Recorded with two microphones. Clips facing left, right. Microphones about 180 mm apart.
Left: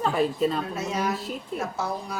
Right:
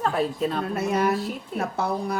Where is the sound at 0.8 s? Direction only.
60° right (ahead or behind).